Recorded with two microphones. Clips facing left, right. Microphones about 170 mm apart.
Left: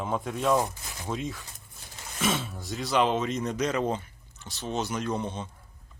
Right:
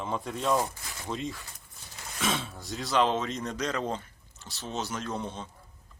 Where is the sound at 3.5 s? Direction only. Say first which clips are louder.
Left 4 dB; 5° left (ahead or behind).